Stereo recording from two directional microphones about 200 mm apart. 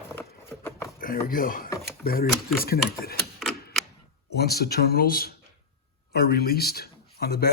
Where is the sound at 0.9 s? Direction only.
45° left (ahead or behind).